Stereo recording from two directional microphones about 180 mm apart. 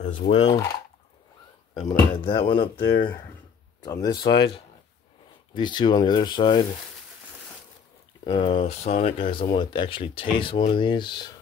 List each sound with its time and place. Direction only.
0.3 s cutlery: 35° left (ahead or behind)
1.9 s speech: 25° left (ahead or behind)
5.5 s speech: 25° left (ahead or behind)
8.2 s speech: 30° left (ahead or behind)